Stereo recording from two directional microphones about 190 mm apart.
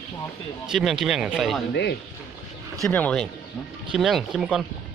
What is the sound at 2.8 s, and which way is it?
Speech, 5° left (ahead or behind).